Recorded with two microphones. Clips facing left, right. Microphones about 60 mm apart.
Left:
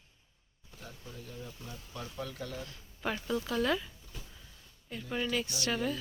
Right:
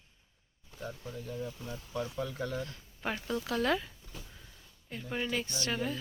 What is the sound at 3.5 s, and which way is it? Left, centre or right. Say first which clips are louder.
Speech: right 2 dB; right.